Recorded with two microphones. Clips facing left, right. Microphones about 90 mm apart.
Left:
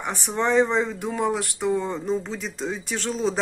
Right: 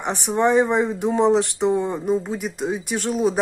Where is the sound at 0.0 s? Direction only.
20° right (ahead or behind).